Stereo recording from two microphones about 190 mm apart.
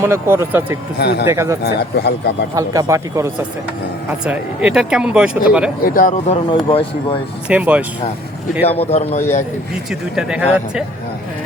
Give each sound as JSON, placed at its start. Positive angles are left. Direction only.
{"t": 0.0, "sound": "speech", "side_deg": -15}
{"t": 0.9, "sound": "speech", "side_deg": 60}
{"t": 1.3, "sound": "speech", "side_deg": -15}
{"t": 1.6, "sound": "speech", "side_deg": 60}
{"t": 2.6, "sound": "speech", "side_deg": -20}
{"t": 4.3, "sound": "speech", "side_deg": -5}
{"t": 5.8, "sound": "speech", "side_deg": 45}
{"t": 6.5, "sound": "speech", "side_deg": 25}
{"t": 7.4, "sound": "speech", "side_deg": -5}
{"t": 8.8, "sound": "a man's voice", "side_deg": 35}
{"t": 9.9, "sound": "speech", "side_deg": -5}